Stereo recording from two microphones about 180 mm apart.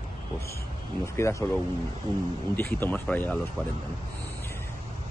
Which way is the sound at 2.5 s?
10° left (ahead or behind).